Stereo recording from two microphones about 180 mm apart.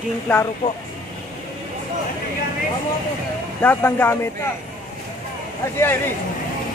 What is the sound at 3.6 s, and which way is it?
Speech, 10° left (ahead or behind).